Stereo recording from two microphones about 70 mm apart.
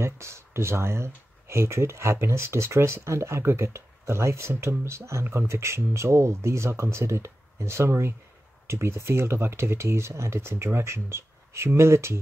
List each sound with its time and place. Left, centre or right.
0.0 s speech: right